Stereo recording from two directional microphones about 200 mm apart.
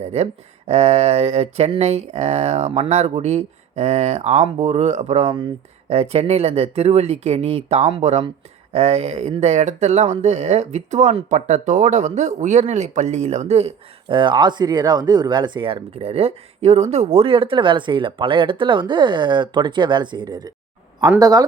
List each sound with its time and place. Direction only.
0.0 s a man's voice: 30° right (ahead or behind)